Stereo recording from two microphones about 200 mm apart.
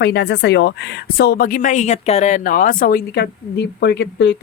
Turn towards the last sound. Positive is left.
turn(degrees=60)  # may be behind; listen again after turning